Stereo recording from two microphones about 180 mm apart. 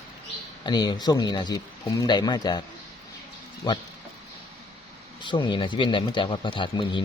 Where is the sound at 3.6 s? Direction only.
20° left (ahead or behind).